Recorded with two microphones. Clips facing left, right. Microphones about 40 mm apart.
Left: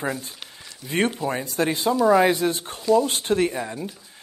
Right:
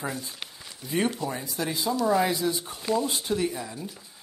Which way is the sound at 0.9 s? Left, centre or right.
Left.